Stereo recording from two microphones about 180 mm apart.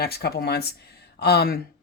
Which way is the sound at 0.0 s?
60° left (ahead or behind).